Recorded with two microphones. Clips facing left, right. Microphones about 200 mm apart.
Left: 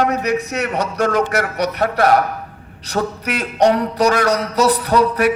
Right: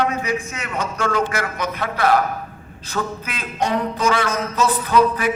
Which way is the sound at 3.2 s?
75° left (ahead or behind).